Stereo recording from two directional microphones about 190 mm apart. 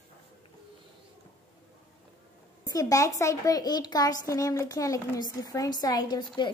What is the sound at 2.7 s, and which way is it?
A child's voice, 20° left (ahead or behind).